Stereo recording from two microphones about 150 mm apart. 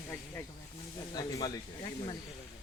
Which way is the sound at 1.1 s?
25° left (ahead or behind).